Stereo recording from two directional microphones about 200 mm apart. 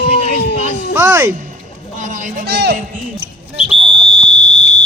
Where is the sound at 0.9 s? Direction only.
10° right (ahead or behind).